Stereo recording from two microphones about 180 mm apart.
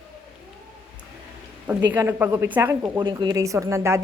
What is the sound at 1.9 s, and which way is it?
A woman's voice, 10° right (ahead or behind).